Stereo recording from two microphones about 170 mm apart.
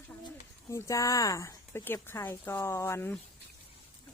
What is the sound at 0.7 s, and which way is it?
Speech, 20° left (ahead or behind).